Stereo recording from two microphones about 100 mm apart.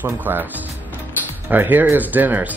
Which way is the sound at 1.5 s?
20° right (ahead or behind).